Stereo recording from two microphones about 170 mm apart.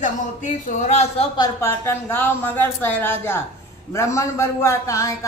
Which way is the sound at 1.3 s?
20° left (ahead or behind).